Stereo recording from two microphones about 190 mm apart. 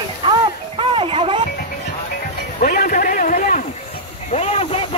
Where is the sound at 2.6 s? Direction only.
50° left (ahead or behind).